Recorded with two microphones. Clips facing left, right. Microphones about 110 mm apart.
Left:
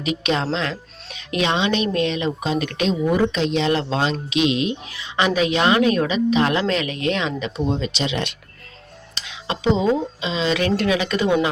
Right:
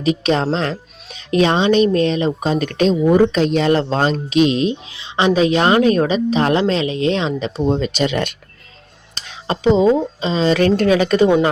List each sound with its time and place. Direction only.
0.0 s speech: 35° right (ahead or behind)
4.9 s speech: 20° right (ahead or behind)